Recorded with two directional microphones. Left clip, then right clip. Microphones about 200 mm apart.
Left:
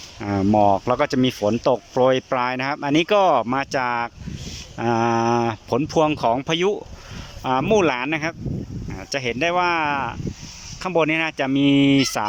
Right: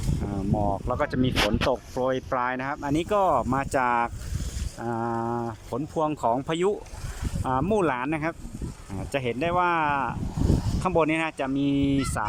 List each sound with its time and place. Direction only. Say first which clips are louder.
0.3 s speech: left 11 dB; 10° left (ahead or behind)
4.8 s speech: left 9 dB; 10° left (ahead or behind)